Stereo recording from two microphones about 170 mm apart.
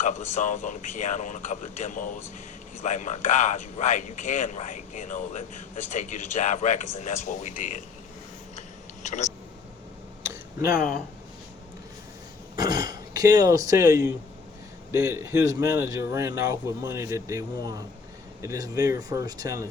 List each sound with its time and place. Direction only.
0.0 s speech: 45° left (ahead or behind)
9.0 s speech: 40° left (ahead or behind)
10.7 s speech: 55° left (ahead or behind)
12.5 s a man's voice: 25° right (ahead or behind)